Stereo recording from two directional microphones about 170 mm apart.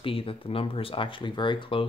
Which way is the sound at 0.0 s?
30° left (ahead or behind).